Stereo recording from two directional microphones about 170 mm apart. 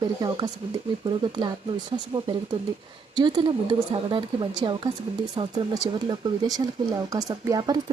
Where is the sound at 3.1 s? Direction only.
25° right (ahead or behind).